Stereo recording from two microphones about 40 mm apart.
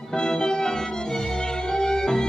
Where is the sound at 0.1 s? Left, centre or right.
Centre.